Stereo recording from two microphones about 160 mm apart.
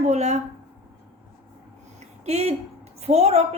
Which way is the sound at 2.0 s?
40° right (ahead or behind).